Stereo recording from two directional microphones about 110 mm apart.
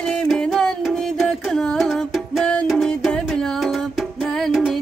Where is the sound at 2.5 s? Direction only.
10° left (ahead or behind).